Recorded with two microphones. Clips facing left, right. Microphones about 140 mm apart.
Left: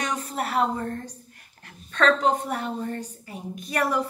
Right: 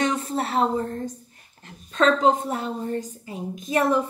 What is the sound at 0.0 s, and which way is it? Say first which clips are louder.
A woman's voice: right 5 dB; 30° right (ahead or behind).